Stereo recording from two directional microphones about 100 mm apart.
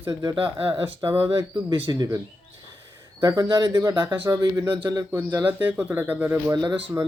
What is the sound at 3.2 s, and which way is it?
Speech, 40° right (ahead or behind).